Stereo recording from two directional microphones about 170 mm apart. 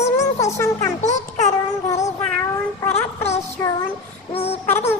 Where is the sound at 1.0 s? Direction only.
45° left (ahead or behind).